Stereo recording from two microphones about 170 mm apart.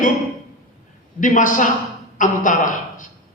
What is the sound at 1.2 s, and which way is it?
A woman's voice, 50° left (ahead or behind).